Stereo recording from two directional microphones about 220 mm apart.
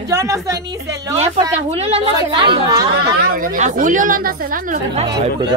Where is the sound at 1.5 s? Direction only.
30° right (ahead or behind).